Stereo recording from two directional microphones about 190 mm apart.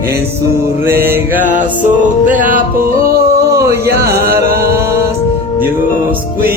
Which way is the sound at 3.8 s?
55° right (ahead or behind).